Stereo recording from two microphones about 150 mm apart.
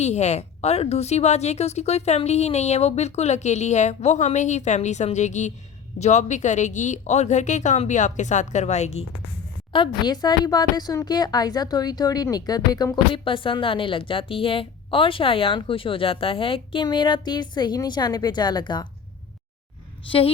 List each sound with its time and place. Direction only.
0.0 s a woman's voice: 50° left (ahead or behind)
9.7 s a woman's voice: 30° left (ahead or behind)
20.1 s a woman's voice: 40° left (ahead or behind)